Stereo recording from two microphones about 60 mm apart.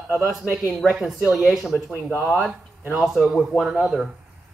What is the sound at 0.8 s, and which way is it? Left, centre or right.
Speech, centre.